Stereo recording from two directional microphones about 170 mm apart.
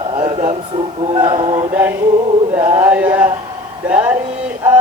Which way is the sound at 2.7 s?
10° right (ahead or behind).